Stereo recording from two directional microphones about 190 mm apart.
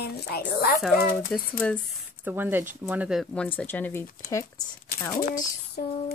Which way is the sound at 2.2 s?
10° right (ahead or behind).